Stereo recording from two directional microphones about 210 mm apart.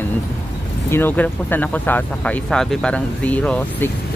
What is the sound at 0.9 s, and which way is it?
Speech, 10° left (ahead or behind).